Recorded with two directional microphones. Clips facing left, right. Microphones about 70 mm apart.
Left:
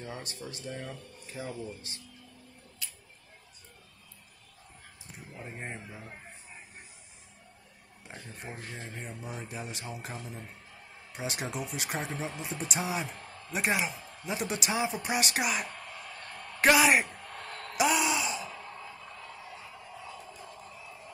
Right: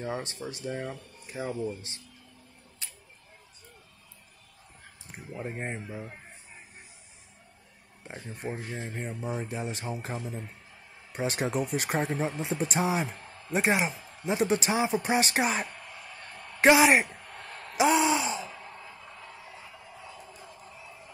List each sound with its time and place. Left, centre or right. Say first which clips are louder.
0.0 s speech: right 7 dB; right
2.8 s tick-tock: even; right
5.1 s speech: right 7 dB; right
8.0 s speech: right 7 dB; right
17.7 s a sound: right 4 dB; right